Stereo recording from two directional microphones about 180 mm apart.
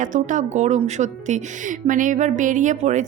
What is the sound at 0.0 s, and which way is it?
Speech, 45° right (ahead or behind).